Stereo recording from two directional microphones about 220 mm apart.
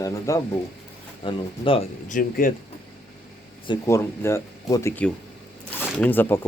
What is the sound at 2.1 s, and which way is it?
Speech, 40° left (ahead or behind).